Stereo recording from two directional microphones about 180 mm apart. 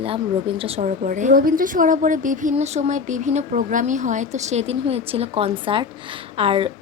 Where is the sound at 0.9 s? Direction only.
45° right (ahead or behind).